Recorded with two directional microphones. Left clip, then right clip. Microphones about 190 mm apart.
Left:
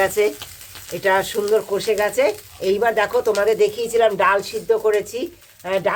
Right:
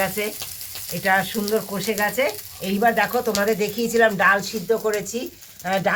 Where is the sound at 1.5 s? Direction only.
60° left (ahead or behind).